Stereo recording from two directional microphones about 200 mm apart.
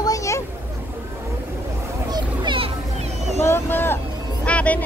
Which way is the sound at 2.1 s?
25° right (ahead or behind).